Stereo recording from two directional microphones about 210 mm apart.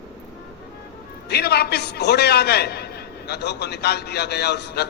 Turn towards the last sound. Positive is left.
turn(degrees=50)  # may be behind; listen again after turning